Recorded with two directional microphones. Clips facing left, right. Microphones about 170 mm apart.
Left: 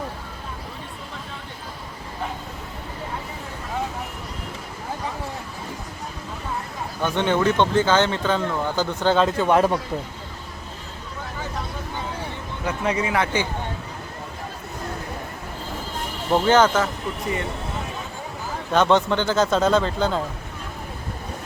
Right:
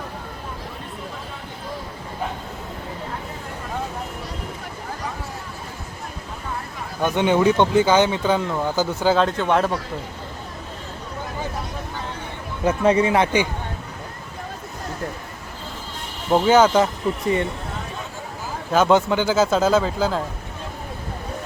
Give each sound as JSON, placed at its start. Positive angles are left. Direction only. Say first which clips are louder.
{"t": 7.0, "sound": "speech", "louder": "right 3 dB", "side_deg": -10}
{"t": 12.6, "sound": "speech", "louder": "right 7 dB", "side_deg": -30}
{"t": 16.3, "sound": "speech", "louder": "right 2 dB", "side_deg": -10}
{"t": 18.7, "sound": "a man's voice", "louder": "right 2 dB", "side_deg": -5}